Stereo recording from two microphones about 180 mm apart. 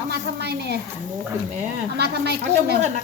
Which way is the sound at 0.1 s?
65° right (ahead or behind).